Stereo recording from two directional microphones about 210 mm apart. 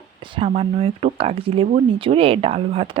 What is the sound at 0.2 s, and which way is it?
Speech, 25° right (ahead or behind).